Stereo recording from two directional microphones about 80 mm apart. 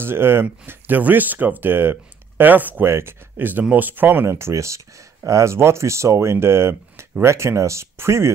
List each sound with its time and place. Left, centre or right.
0.0 s speech: right